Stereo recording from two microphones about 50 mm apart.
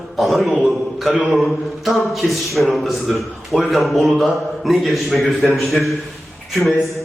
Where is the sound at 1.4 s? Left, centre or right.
Centre.